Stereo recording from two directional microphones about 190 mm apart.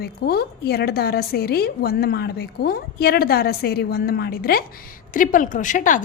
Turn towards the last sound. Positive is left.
turn(degrees=45)  # may be behind; listen again after turning